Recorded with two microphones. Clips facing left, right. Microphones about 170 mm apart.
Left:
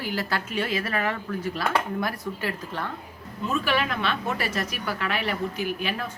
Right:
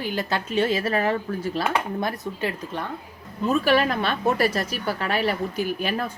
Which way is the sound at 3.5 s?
40° right (ahead or behind).